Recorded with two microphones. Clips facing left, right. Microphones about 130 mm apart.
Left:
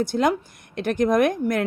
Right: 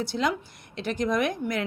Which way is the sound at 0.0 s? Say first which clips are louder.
Left 6 dB; 50° left (ahead or behind).